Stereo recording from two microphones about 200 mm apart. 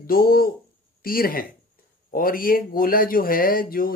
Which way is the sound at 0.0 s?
45° left (ahead or behind).